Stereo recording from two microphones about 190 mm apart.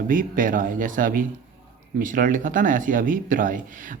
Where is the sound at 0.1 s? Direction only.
45° right (ahead or behind).